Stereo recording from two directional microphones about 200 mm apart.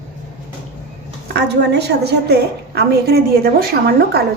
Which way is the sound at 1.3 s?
55° right (ahead or behind).